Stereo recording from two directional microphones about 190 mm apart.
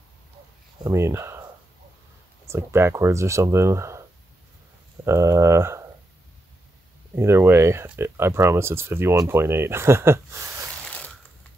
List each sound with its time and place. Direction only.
0.8 s speech: 15° right (ahead or behind)
2.4 s speech: 15° right (ahead or behind)
5.0 s speech: 15° right (ahead or behind)
7.2 s speech: 15° right (ahead or behind)